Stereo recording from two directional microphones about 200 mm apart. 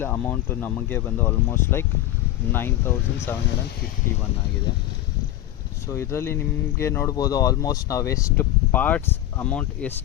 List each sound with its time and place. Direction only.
0.0 s speech: 10° left (ahead or behind)
4.7 s speech: 20° left (ahead or behind)
5.9 s speech: 15° left (ahead or behind)